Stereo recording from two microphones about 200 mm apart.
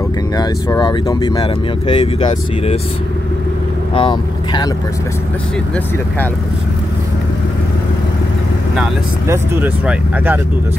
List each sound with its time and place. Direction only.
0.4 s speech: 20° left (ahead or behind)
3.9 s speech: 25° left (ahead or behind)
9.3 s speech: 10° right (ahead or behind)